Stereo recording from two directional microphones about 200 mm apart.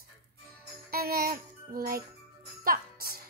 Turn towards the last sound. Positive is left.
turn(degrees=-50)  # may be behind; listen again after turning